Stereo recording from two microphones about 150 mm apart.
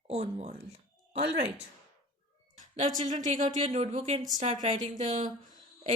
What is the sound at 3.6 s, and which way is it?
Speech, 45° right (ahead or behind).